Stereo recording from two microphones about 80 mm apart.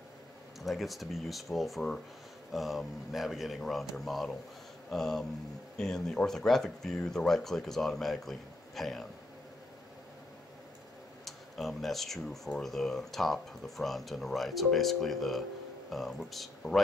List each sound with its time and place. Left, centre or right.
0.6 s speech: centre
4.8 s a sound: centre
5.8 s speech: centre
11.2 s speech: centre